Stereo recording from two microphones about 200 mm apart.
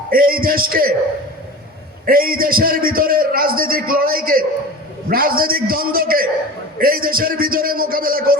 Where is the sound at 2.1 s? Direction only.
45° right (ahead or behind).